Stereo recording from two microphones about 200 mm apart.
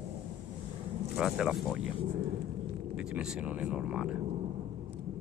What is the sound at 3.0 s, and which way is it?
Speech, 5° right (ahead or behind).